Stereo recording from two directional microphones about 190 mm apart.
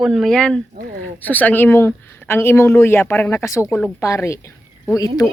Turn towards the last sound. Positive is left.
turn(degrees=20)  # may be behind; listen again after turning